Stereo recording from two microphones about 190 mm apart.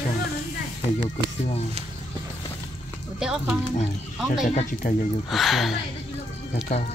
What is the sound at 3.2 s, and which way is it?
Speech, 5° right (ahead or behind).